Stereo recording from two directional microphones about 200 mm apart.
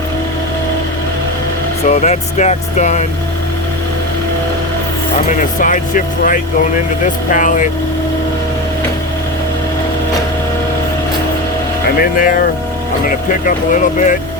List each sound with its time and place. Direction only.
1.9 s speech: 35° left (ahead or behind)
5.3 s speech: 40° left (ahead or behind)
11.9 s speech: 45° left (ahead or behind)